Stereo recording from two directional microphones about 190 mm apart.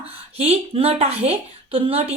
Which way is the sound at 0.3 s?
30° right (ahead or behind).